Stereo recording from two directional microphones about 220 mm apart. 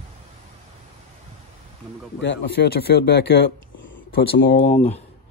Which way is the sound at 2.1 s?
55° left (ahead or behind).